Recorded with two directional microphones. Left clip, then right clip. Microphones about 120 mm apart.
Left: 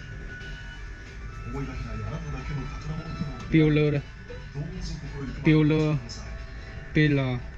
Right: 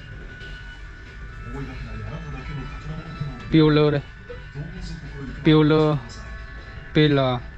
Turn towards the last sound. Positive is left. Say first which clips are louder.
# right 6 dB
turn(degrees=20)  # may be behind; listen again after turning